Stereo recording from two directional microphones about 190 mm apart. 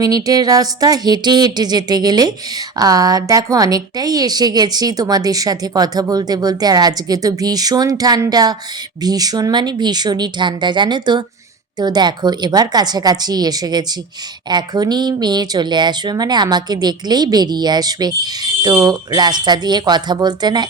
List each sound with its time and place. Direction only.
0.0 s speech: 20° right (ahead or behind)